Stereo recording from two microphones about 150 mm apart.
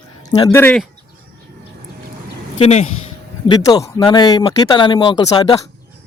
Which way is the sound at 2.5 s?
45° left (ahead or behind).